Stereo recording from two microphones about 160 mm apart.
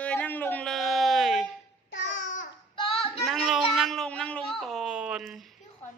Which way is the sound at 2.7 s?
30° left (ahead or behind).